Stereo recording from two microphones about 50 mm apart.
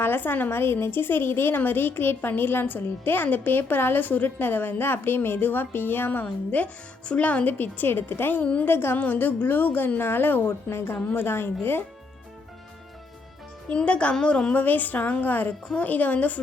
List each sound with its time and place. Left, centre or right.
0.0 s a woman's voice: left
0.5 s a woman's voice: left
6.5 s speech: left
7.6 s a woman's voice: left
9.0 s a woman's voice: left
10.7 s speech: left
11.0 s a woman's voice: left
13.7 s speech: left
14.5 s a woman's voice: left